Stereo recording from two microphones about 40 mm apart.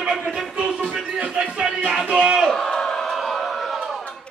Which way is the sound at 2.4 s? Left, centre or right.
Centre.